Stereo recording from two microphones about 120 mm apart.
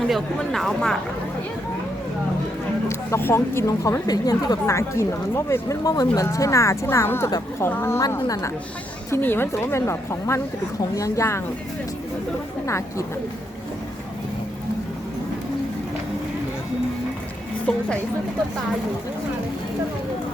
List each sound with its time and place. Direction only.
0.1 s speech: centre (ahead or behind)
3.1 s a woman's voice: 20° left (ahead or behind)
12.6 s a woman's voice: 25° left (ahead or behind)
17.7 s a woman's voice: 10° left (ahead or behind)